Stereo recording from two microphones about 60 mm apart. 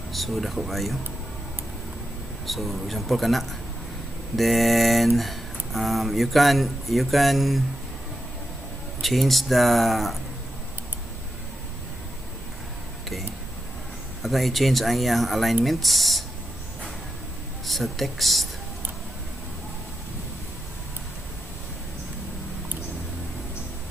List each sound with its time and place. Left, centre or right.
0.1 s speech: centre
2.4 s speech: centre
9.0 s speech: centre
14.2 s speech: centre
17.6 s speech: centre